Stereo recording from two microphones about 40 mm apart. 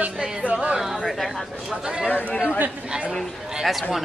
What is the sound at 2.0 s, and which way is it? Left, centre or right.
Speech, left.